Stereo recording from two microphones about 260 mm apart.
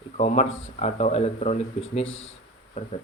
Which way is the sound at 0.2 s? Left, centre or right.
Left.